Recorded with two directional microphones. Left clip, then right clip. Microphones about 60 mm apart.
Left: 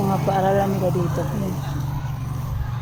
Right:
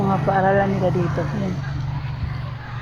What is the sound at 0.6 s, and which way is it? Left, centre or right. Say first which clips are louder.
Speech: right 1 dB; left.